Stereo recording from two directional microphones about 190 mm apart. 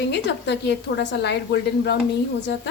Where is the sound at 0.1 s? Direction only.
65° left (ahead or behind).